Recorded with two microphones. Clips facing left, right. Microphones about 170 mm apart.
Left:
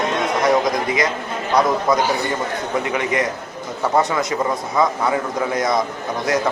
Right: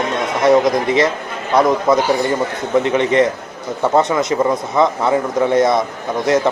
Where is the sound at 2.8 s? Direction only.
25° right (ahead or behind).